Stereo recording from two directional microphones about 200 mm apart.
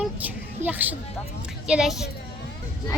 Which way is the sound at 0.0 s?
5° right (ahead or behind).